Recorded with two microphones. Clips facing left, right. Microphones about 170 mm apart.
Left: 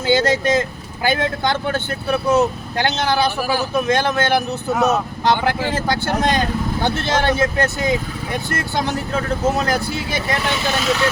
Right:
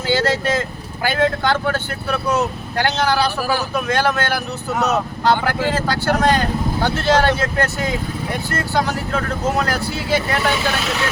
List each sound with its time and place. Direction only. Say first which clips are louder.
0.1 s speech: left 2 dB; 20° left (ahead or behind)